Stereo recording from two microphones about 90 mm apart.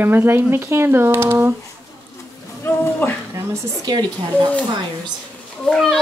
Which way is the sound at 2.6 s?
25° left (ahead or behind).